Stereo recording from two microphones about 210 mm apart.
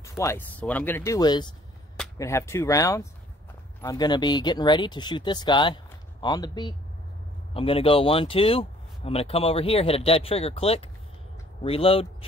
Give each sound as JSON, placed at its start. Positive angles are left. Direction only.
{"t": 0.2, "sound": "speech", "side_deg": 10}